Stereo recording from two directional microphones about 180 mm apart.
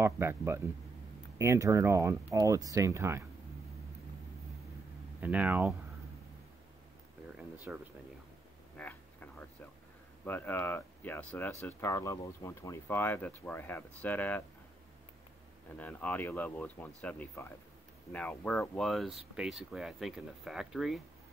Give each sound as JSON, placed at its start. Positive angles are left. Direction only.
{"t": 0.0, "sound": "speech", "side_deg": -15}
{"t": 5.2, "sound": "speech", "side_deg": -10}
{"t": 7.3, "sound": "a sound", "side_deg": -10}
{"t": 8.7, "sound": "a sound", "side_deg": 10}
{"t": 10.2, "sound": "speech", "side_deg": 10}
{"t": 15.8, "sound": "speech", "side_deg": 10}